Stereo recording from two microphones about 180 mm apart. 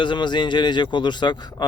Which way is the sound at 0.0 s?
25° left (ahead or behind).